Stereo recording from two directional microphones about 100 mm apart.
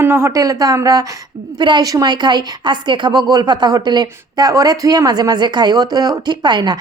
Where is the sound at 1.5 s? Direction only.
50° right (ahead or behind).